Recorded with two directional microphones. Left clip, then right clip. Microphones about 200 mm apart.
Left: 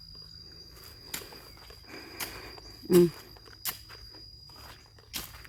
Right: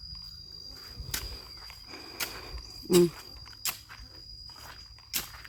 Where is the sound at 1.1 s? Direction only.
15° right (ahead or behind).